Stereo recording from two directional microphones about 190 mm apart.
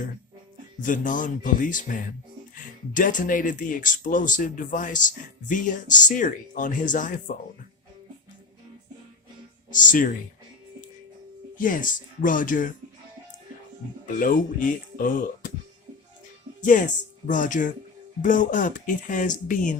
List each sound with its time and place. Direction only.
0.8 s speech: 45° left (ahead or behind)
9.7 s speech: 45° left (ahead or behind)
11.5 s speech: 45° left (ahead or behind)
14.2 s speech: 45° left (ahead or behind)
16.6 s speech: 40° left (ahead or behind)